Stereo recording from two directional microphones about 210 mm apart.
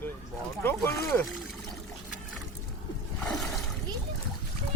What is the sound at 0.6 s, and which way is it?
Speech, 10° left (ahead or behind).